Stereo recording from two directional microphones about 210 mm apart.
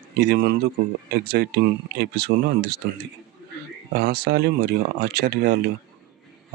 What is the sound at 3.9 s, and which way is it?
Speech, 50° right (ahead or behind).